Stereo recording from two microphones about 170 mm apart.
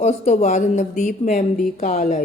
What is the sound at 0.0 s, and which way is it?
A woman's voice, 40° left (ahead or behind).